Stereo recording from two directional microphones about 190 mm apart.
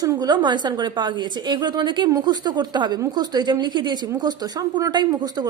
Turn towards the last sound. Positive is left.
turn(degrees=-20)  # may be behind; listen again after turning